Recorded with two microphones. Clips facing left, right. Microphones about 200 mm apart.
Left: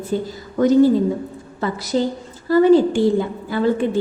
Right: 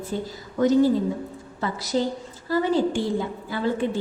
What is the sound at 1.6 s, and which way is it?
A woman's voice, 55° left (ahead or behind).